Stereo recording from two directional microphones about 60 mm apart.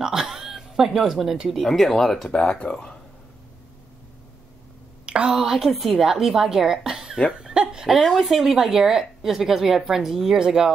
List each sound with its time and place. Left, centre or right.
0.0 s speech: centre
2.3 s speech: centre
5.0 s a sound: centre
5.4 s speech: centre